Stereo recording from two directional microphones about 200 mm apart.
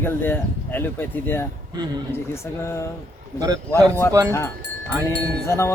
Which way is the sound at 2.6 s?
15° left (ahead or behind).